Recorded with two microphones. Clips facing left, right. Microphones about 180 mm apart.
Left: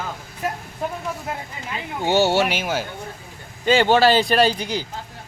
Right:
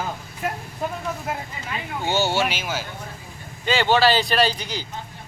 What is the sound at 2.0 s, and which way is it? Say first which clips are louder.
Speech: left 5 dB; 65° left (ahead or behind).